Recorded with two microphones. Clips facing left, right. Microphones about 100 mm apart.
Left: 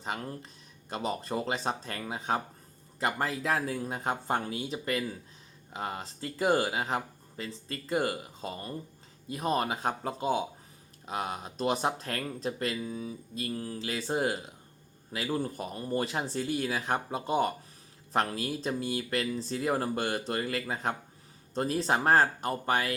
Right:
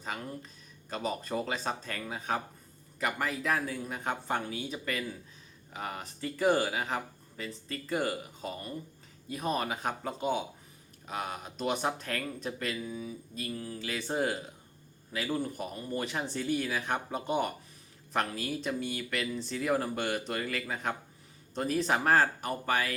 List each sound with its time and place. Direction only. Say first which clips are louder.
0.9 s speech: left 1 dB; 30° left (ahead or behind)